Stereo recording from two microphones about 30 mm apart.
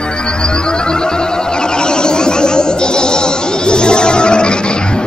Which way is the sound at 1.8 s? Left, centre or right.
Left.